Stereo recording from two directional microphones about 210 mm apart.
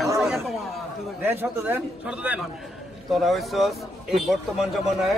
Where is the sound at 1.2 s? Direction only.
10° right (ahead or behind).